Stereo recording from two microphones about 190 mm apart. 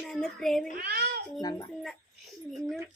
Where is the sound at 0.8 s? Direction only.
55° right (ahead or behind).